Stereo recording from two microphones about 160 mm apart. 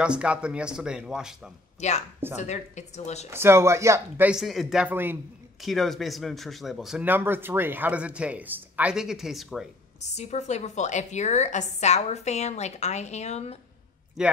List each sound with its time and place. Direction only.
0.0 s speech: 5° right (ahead or behind)
1.8 s a woman's voice: 45° left (ahead or behind)
3.3 s speech: 15° right (ahead or behind)
4.3 s speech: centre (ahead or behind)
5.6 s speech: centre (ahead or behind)
10.0 s a woman's voice: 45° left (ahead or behind)
14.2 s speech: 5° right (ahead or behind)